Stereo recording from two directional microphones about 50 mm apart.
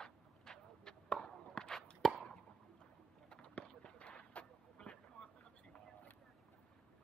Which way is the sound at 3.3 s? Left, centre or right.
Left.